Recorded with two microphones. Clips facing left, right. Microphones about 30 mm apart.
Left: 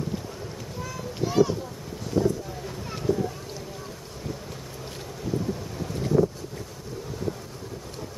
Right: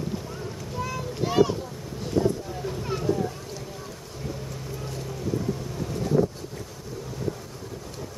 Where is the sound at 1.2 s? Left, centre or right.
Right.